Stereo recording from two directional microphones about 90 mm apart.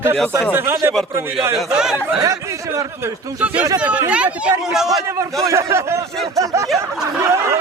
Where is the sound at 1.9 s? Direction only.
30° right (ahead or behind).